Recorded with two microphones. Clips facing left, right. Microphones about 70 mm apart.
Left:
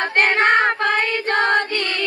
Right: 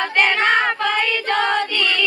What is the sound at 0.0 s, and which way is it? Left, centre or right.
Child singing, left.